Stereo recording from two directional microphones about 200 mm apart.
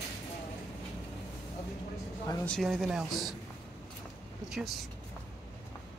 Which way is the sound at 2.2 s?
15° left (ahead or behind).